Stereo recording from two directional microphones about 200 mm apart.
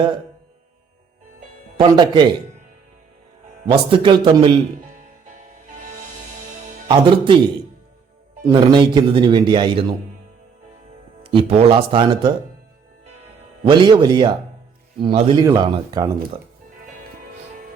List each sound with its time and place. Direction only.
1.7 s a man's voice: 25° right (ahead or behind)
3.7 s a man's voice: 25° right (ahead or behind)
6.8 s a man's voice: 25° right (ahead or behind)
8.4 s a man's voice: 25° right (ahead or behind)
11.2 s a man's voice: 25° right (ahead or behind)
13.7 s a man's voice: 25° right (ahead or behind)